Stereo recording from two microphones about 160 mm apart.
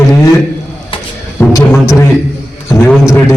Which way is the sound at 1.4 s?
15° left (ahead or behind).